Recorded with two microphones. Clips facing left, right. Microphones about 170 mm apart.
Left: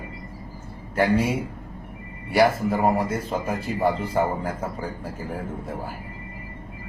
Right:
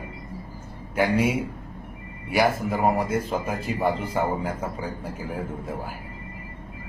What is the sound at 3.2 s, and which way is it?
Speech, 30° left (ahead or behind).